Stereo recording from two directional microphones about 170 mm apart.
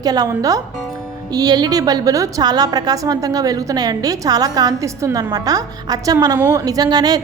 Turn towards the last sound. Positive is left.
turn(degrees=-25)  # may be behind; listen again after turning